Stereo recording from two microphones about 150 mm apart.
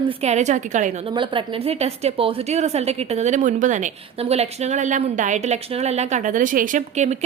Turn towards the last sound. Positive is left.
turn(degrees=-55)  # may be behind; listen again after turning